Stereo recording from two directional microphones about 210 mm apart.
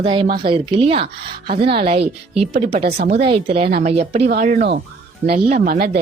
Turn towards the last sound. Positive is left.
turn(degrees=-45)  # may be behind; listen again after turning